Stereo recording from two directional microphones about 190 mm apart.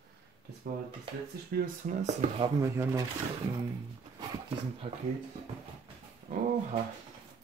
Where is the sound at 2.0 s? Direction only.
40° right (ahead or behind).